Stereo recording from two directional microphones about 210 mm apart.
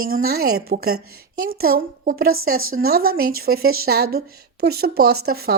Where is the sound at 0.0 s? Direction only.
45° right (ahead or behind).